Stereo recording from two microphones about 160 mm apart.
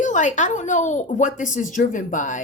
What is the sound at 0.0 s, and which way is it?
A woman's voice, 50° left (ahead or behind).